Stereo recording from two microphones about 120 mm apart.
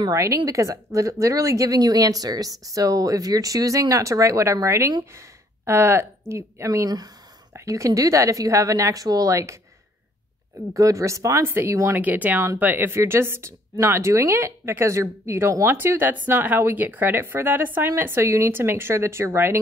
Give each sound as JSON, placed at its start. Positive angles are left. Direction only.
{"t": 0.0, "sound": "a woman's voice", "side_deg": -25}
{"t": 10.7, "sound": "a woman's voice", "side_deg": -25}
{"t": 12.0, "sound": "a woman's voice", "side_deg": -15}